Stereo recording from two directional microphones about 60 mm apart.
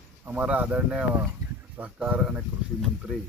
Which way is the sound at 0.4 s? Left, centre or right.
Right.